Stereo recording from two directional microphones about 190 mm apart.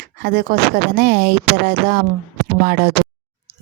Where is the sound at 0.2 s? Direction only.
55° right (ahead or behind).